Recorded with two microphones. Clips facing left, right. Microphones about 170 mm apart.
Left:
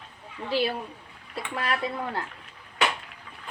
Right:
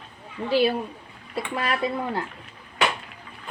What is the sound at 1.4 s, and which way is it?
Speech, 5° right (ahead or behind).